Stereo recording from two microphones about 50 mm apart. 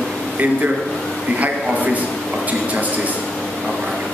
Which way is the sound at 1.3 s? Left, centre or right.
Right.